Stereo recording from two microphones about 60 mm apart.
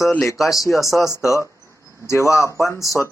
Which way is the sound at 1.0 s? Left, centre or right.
Left.